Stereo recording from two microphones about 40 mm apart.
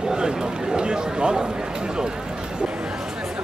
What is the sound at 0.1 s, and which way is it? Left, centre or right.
A man's voice, centre.